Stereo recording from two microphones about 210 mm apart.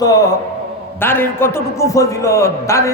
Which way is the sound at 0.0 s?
15° left (ahead or behind).